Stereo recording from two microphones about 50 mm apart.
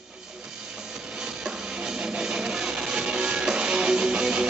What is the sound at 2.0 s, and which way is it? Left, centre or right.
Music, centre.